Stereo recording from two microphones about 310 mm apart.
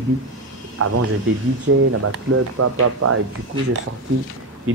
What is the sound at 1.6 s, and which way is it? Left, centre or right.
Speech, right.